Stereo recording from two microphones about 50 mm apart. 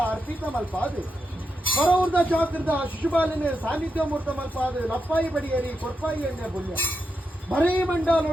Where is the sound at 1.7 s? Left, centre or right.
Left.